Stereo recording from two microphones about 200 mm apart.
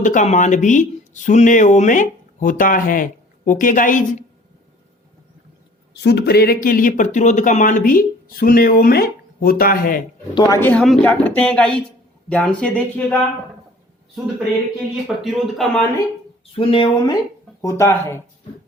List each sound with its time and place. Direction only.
0.0 s speech: 35° left (ahead or behind)
5.9 s speech: 55° left (ahead or behind)
10.3 s speech: 15° left (ahead or behind)
15.0 s speech: centre (ahead or behind)
16.5 s speech: 25° left (ahead or behind)